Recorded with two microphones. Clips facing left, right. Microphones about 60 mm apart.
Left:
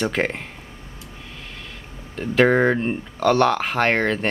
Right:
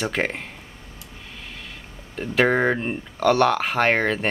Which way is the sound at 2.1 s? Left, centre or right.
Centre.